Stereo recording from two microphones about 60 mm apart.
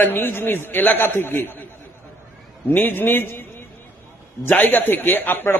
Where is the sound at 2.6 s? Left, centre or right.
Left.